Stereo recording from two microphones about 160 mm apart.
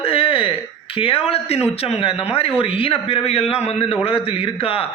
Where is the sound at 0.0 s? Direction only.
35° left (ahead or behind).